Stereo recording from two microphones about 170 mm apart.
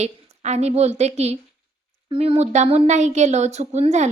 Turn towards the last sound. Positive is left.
turn(degrees=-40)  # may be behind; listen again after turning